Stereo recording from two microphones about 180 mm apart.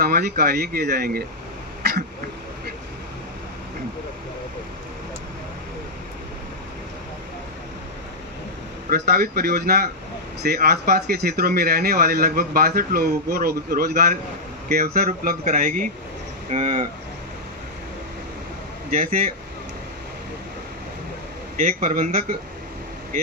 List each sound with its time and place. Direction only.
0.0 s speech: 65° right (ahead or behind)
1.8 s throat clearing: 60° right (ahead or behind)
8.9 s speech: 60° right (ahead or behind)
15.4 s speech: 40° right (ahead or behind)
18.9 s speech: 50° right (ahead or behind)
21.6 s speech: 40° right (ahead or behind)